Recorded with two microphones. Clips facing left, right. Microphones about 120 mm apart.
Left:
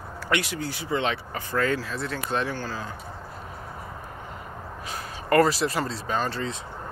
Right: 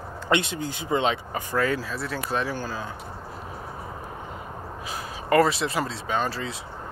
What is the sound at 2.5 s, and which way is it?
Speech, 15° right (ahead or behind).